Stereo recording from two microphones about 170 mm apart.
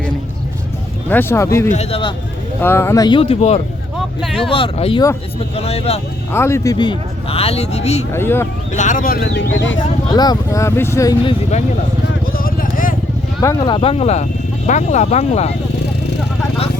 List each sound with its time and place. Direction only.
1.1 s speech: 15° left (ahead or behind)
1.7 s speech: 35° left (ahead or behind)
2.6 s speech: 15° left (ahead or behind); by 3.6 s 35° left (ahead or behind)
3.9 s vehicle: centre (ahead or behind)
4.4 s speech: 30° left (ahead or behind)
6.3 s speech: 15° left (ahead or behind)
6.7 s speech: 30° left (ahead or behind)
8.1 s speech: 15° left (ahead or behind)
8.7 s speech: 45° left (ahead or behind); by 9.4 s 70° left (ahead or behind)
9.6 s speech: 90° left
10.1 s speech: 25° left (ahead or behind)
12.3 s vehicle: 60° left (ahead or behind)
13.4 s speech: 20° left (ahead or behind)
13.7 s speech: 35° left (ahead or behind)